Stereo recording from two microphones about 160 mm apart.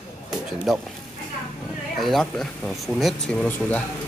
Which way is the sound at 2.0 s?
Centre (ahead or behind).